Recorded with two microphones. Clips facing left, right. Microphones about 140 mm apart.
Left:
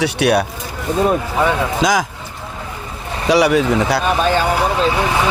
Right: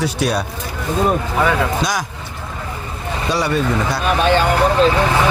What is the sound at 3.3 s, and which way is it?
Speech, 90° left.